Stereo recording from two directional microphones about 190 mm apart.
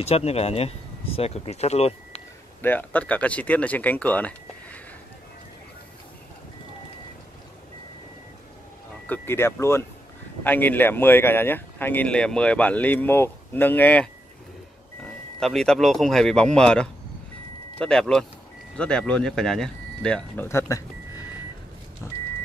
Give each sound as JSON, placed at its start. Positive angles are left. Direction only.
{"t": 0.0, "sound": "speech", "side_deg": 35}
{"t": 2.6, "sound": "speech", "side_deg": 10}
{"t": 9.0, "sound": "speech", "side_deg": 10}
{"t": 15.4, "sound": "speech", "side_deg": 5}
{"t": 22.0, "sound": "vehicle", "side_deg": 15}